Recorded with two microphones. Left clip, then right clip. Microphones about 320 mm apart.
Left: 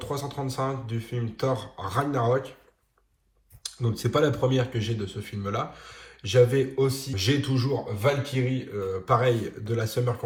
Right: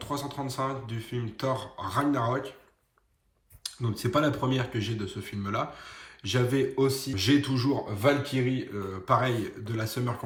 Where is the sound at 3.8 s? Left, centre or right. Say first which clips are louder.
Left 3 dB; centre.